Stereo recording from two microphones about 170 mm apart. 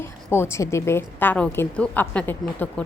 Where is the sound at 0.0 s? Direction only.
15° left (ahead or behind).